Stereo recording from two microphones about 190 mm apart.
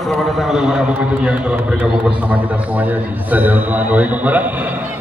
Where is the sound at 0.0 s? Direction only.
Centre (ahead or behind).